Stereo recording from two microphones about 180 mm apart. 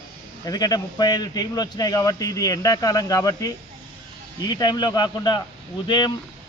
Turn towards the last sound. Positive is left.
turn(degrees=25)  # may be behind; listen again after turning